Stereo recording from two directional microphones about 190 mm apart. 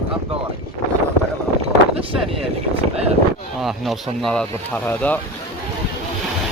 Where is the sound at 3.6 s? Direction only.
Centre (ahead or behind).